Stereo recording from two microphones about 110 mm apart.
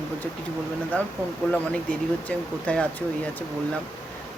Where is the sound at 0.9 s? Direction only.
15° left (ahead or behind).